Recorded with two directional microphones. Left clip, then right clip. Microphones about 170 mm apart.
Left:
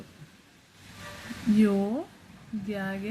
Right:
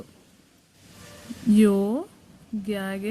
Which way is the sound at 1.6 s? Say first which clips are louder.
Right 5 dB; 50° right (ahead or behind).